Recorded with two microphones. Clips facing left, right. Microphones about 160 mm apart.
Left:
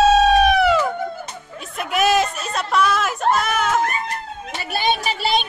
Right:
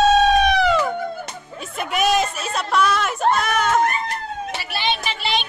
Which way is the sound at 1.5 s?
Centre (ahead or behind).